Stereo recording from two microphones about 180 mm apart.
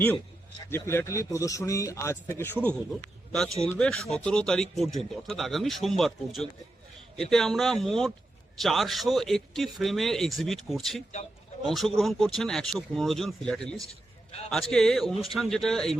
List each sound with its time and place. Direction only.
0.7 s a man's voice: 15° left (ahead or behind)
3.6 s a man's voice: 5° left (ahead or behind)